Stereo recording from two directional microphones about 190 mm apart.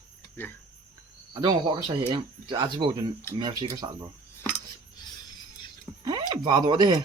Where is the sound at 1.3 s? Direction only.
25° right (ahead or behind).